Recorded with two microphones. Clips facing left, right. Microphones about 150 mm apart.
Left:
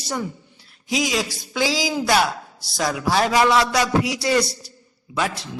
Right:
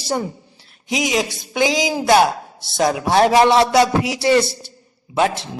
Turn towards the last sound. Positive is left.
turn(degrees=-25)  # may be behind; listen again after turning